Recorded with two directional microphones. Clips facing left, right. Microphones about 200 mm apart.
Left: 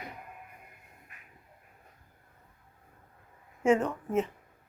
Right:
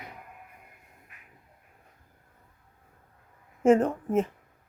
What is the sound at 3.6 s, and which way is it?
Speech, 50° right (ahead or behind).